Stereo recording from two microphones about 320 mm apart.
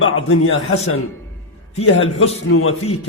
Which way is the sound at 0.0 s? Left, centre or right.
Left.